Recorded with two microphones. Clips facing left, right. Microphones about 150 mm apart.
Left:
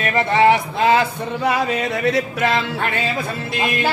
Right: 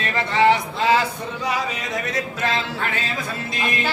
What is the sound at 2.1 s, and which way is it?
Speech, 65° left (ahead or behind).